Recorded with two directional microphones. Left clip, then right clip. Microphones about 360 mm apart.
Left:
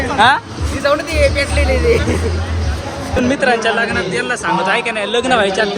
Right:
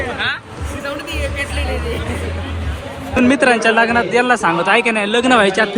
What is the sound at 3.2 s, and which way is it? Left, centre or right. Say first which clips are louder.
A man's voice: right 2 dB; centre.